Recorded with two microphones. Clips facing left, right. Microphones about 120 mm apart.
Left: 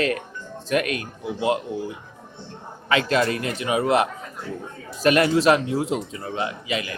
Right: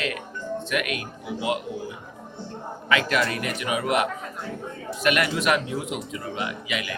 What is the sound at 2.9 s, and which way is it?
A man's voice, 30° left (ahead or behind).